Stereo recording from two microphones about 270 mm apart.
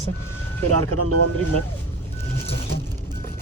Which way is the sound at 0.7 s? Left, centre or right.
Right.